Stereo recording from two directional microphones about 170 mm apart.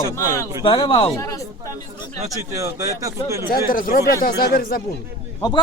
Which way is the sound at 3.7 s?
55° left (ahead or behind).